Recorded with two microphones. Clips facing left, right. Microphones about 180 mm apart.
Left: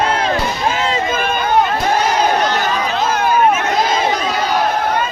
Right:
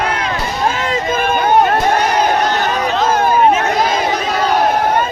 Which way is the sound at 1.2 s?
50° right (ahead or behind).